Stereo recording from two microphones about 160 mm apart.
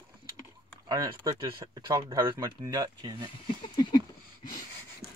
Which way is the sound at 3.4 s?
30° left (ahead or behind).